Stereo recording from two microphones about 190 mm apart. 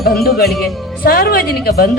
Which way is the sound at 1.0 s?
50° left (ahead or behind).